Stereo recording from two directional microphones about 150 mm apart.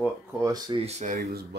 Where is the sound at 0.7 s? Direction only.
45° right (ahead or behind).